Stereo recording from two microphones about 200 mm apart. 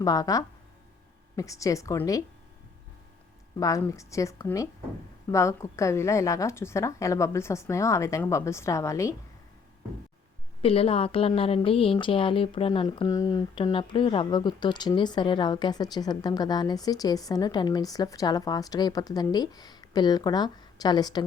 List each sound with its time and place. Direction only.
0.0 s a woman's voice: 15° left (ahead or behind)
3.6 s a woman's voice: 15° left (ahead or behind)
10.6 s speech: 30° left (ahead or behind)